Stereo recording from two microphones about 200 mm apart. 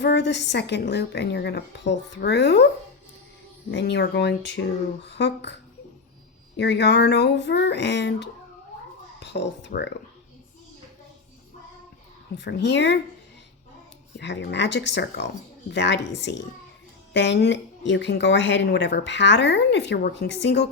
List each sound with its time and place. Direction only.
0.0 s speech: 60° left (ahead or behind)
3.7 s speech: 60° left (ahead or behind)
6.6 s speech: 55° left (ahead or behind)
12.3 s speech: 55° left (ahead or behind)
14.2 s speech: 60° left (ahead or behind)